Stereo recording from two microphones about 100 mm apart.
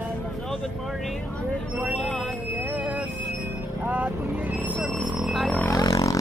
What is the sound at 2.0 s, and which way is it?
Speech, 5° left (ahead or behind).